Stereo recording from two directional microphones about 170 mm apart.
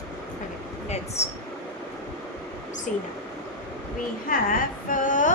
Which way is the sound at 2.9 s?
50° left (ahead or behind).